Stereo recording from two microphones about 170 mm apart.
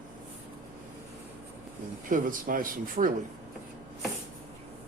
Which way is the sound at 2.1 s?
55° right (ahead or behind).